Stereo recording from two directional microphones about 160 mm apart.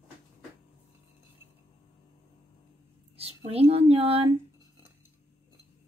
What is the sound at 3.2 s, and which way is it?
Speech, 40° right (ahead or behind).